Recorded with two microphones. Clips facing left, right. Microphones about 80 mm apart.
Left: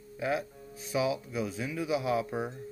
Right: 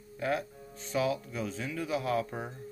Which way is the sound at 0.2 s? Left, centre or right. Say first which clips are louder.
Even; centre.